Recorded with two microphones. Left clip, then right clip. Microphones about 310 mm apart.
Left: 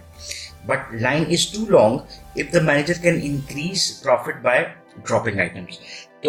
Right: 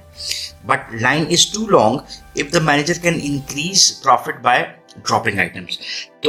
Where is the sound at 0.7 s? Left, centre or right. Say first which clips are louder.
Right 4 dB; right.